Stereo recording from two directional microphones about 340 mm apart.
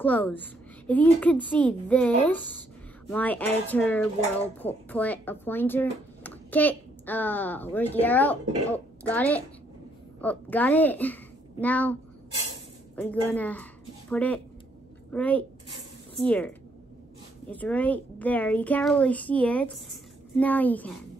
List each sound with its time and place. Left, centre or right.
0.0 s speech: centre